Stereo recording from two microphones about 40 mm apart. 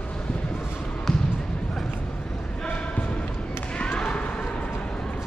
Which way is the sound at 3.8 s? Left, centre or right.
Left.